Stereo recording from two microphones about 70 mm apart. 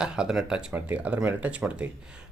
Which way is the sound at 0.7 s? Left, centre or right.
Right.